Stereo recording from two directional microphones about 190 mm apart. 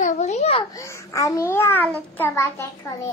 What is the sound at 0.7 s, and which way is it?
A child's voice, 15° left (ahead or behind).